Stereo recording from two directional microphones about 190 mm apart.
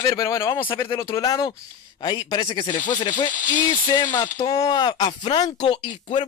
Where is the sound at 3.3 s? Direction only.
45° left (ahead or behind).